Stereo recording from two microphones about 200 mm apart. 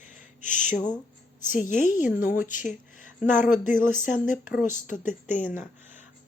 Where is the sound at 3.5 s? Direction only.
40° left (ahead or behind).